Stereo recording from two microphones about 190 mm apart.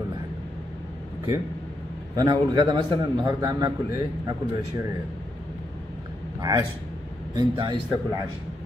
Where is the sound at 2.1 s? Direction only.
20° right (ahead or behind).